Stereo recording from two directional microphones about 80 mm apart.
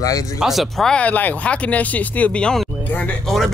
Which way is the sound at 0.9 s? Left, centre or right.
Centre.